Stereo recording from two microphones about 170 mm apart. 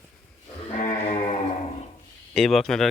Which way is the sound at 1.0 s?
35° left (ahead or behind).